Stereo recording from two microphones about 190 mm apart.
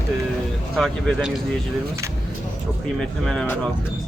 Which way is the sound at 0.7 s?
Centre (ahead or behind).